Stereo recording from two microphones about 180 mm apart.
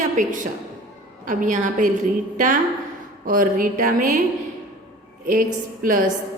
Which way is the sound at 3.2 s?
50° right (ahead or behind).